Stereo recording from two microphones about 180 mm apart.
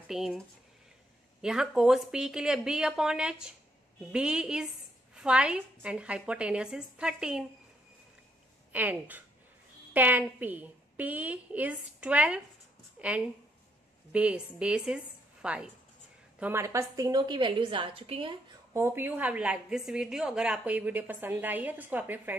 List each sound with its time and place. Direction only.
0.1 s a woman's voice: centre (ahead or behind)
8.7 s a woman's voice: 10° right (ahead or behind); by 18.3 s 30° right (ahead or behind)
18.7 s a woman's voice: 15° right (ahead or behind)